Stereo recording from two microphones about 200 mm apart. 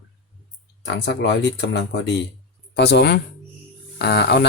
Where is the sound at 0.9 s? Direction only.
60° left (ahead or behind).